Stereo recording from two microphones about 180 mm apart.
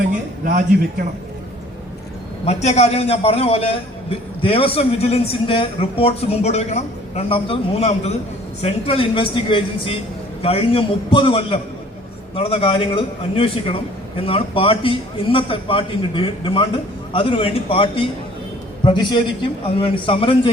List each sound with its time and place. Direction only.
2.4 s a man's voice: 35° left (ahead or behind)